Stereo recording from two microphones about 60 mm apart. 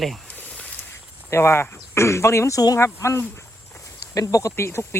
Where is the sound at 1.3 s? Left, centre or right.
Left.